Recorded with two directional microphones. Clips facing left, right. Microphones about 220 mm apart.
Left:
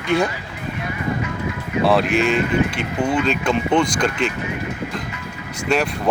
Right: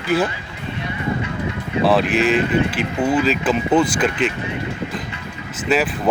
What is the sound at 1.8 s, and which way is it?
Speech, centre (ahead or behind).